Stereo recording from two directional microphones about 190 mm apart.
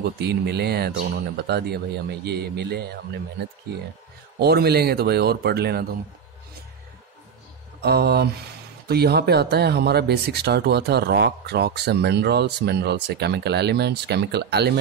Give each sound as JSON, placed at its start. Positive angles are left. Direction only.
{"t": 0.2, "sound": "speech", "side_deg": -60}
{"t": 7.8, "sound": "speech", "side_deg": -55}